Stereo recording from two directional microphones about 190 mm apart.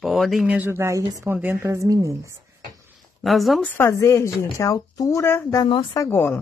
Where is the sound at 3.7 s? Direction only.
15° left (ahead or behind).